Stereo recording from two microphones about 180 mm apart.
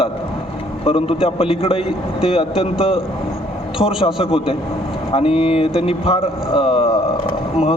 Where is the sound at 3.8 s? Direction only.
30° left (ahead or behind).